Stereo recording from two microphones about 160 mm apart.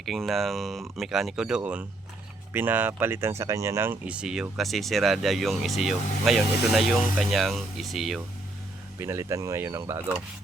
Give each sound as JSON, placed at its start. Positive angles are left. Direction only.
{"t": 0.0, "sound": "speech", "side_deg": 0}
{"t": 9.0, "sound": "speech", "side_deg": -15}